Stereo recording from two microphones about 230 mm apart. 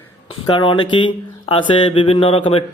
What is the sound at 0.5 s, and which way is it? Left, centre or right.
Speech, left.